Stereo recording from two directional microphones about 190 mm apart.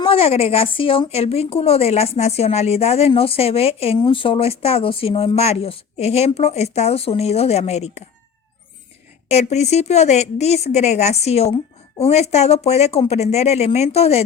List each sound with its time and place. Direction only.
0.0 s a woman's voice: 30° left (ahead or behind)
9.3 s a woman's voice: 35° left (ahead or behind)